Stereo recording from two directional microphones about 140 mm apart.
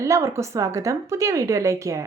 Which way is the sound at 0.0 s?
20° right (ahead or behind).